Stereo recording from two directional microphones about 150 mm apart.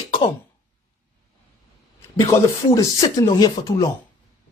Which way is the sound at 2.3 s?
20° left (ahead or behind).